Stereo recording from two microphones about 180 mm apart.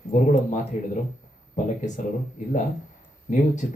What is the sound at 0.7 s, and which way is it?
Speech, 45° left (ahead or behind).